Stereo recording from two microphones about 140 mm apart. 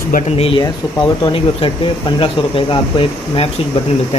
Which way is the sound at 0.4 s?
35° left (ahead or behind).